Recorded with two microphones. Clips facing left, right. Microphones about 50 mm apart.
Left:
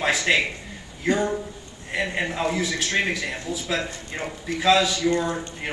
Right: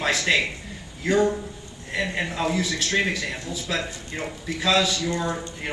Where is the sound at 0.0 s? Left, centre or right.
Centre.